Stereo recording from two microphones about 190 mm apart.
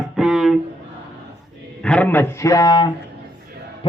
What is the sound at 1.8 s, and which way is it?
A man's voice, 5° left (ahead or behind).